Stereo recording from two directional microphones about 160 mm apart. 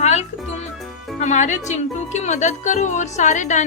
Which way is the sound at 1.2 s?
50° left (ahead or behind).